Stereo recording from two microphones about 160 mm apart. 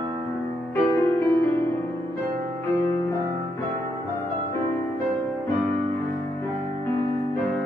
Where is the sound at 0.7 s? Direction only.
15° left (ahead or behind).